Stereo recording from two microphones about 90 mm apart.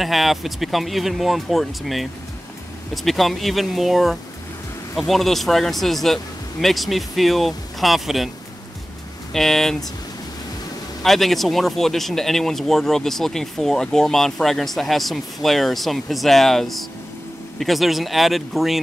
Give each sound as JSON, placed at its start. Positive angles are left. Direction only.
{"t": 0.0, "sound": "speech", "side_deg": 0}
{"t": 9.3, "sound": "speech", "side_deg": 5}
{"t": 11.0, "sound": "speech", "side_deg": 0}